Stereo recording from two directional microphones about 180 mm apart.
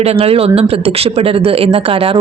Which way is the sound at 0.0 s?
35° right (ahead or behind).